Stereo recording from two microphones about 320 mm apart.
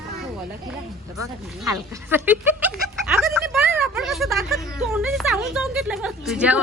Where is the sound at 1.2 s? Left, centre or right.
Centre.